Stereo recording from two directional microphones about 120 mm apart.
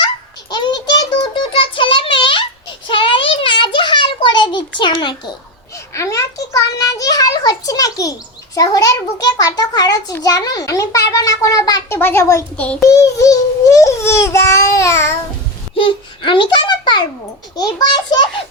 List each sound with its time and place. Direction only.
0.5 s child singing: 35° left (ahead or behind)
2.8 s a sound: 45° left (ahead or behind)
5.9 s a child's voice: 25° left (ahead or behind)
11.9 s a child's voice: 20° left (ahead or behind)
12.5 s child singing: 10° left (ahead or behind)
12.8 s a child's voice: 25° left (ahead or behind)
15.8 s a child's voice: 45° left (ahead or behind)